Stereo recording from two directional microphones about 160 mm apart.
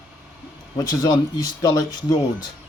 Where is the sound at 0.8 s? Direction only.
20° left (ahead or behind).